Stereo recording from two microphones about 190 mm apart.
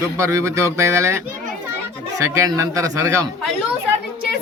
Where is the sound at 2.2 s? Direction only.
15° right (ahead or behind).